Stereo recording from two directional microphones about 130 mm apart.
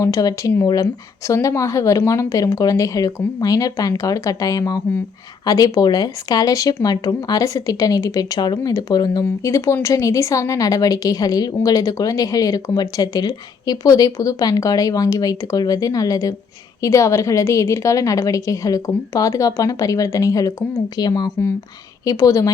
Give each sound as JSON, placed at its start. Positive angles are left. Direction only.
{"t": 0.0, "sound": "speech", "side_deg": 25}